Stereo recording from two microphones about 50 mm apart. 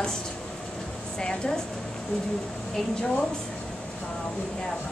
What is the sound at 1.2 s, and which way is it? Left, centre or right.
Speech, centre.